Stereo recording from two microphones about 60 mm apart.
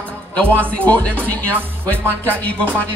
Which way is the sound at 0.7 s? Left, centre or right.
Left.